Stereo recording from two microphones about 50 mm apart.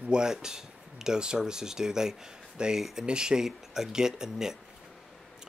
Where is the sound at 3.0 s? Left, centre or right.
Centre.